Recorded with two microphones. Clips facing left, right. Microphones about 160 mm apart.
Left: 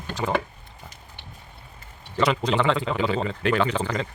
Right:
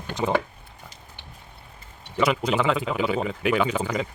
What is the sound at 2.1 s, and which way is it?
A man's voice, 5° right (ahead or behind).